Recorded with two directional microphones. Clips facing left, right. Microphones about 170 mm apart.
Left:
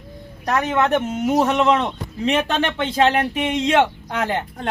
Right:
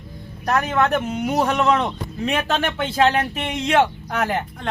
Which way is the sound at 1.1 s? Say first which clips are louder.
Left 2 dB; centre (ahead or behind).